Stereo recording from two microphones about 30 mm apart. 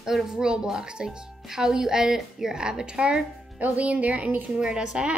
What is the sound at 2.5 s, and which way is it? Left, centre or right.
Speech, right.